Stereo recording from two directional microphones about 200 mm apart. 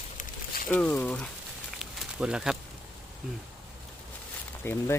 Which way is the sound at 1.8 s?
5° right (ahead or behind).